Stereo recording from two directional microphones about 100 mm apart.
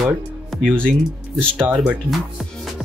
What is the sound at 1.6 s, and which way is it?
Speech, 10° right (ahead or behind).